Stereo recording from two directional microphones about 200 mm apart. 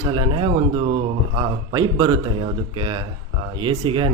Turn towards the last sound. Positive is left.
turn(degrees=-25)  # may be behind; listen again after turning